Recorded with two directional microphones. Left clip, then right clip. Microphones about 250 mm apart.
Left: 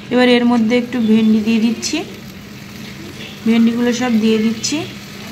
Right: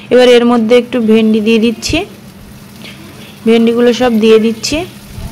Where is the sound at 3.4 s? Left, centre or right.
Centre.